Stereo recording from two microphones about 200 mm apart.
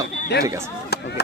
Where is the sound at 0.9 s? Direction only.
55° left (ahead or behind).